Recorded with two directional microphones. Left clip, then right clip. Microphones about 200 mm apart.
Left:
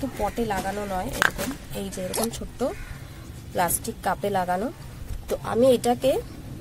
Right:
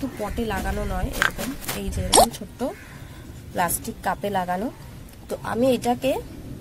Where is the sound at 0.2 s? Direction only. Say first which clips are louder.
Left 2 dB; 5° left (ahead or behind).